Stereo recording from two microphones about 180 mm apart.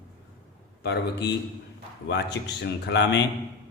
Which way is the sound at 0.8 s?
65° left (ahead or behind).